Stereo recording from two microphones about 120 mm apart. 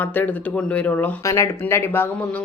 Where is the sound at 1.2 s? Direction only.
25° left (ahead or behind).